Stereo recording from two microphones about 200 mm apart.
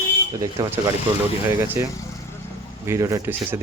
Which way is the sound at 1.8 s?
10° right (ahead or behind).